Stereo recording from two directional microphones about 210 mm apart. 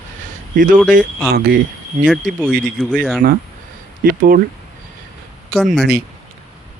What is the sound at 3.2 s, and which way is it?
Speech, 45° right (ahead or behind).